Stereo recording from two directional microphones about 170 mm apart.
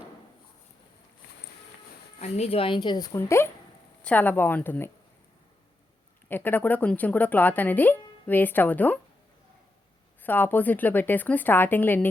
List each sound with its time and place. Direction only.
2.2 s a woman's voice: 40° left (ahead or behind); by 4.9 s 10° left (ahead or behind)
6.2 s speech: 10° left (ahead or behind)
10.2 s speech: 10° left (ahead or behind)